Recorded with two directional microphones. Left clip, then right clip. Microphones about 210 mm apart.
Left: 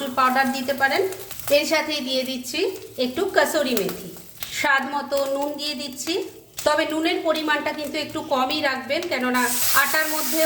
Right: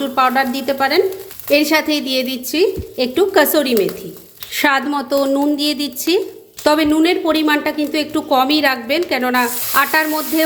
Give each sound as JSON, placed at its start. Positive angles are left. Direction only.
{"t": 0.2, "sound": "a woman's voice", "side_deg": -35}